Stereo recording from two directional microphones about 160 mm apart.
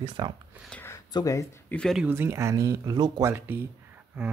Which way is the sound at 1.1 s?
20° left (ahead or behind).